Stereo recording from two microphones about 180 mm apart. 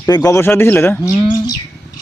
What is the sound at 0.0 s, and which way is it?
Speech, 20° left (ahead or behind).